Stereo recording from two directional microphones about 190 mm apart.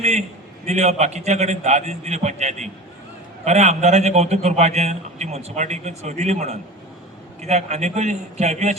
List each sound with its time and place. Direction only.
0.0 s a man's voice: 35° right (ahead or behind)